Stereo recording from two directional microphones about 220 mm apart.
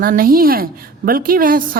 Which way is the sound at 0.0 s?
40° right (ahead or behind).